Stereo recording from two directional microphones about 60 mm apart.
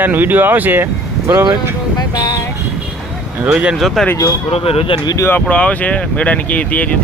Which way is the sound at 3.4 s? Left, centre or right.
Centre.